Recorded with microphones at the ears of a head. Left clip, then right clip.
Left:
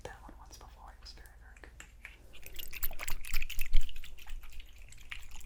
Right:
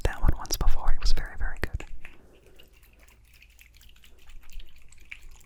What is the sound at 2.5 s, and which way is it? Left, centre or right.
Drip, left.